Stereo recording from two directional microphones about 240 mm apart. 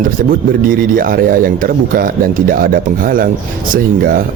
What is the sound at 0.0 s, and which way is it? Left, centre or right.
Speech, right.